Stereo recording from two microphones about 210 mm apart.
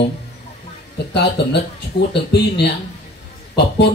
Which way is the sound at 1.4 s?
55° left (ahead or behind).